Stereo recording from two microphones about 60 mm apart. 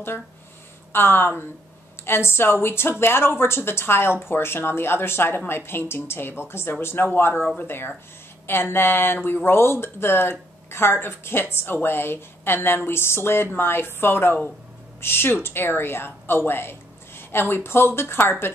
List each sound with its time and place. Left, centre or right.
0.9 s a woman's voice: left